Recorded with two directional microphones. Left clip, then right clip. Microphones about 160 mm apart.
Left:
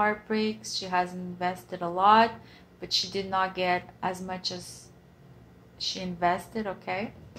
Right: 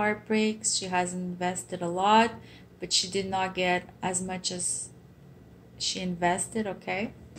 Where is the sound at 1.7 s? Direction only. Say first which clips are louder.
Left 4 dB; 20° left (ahead or behind).